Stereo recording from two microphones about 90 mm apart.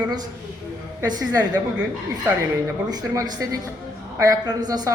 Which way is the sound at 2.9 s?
45° right (ahead or behind).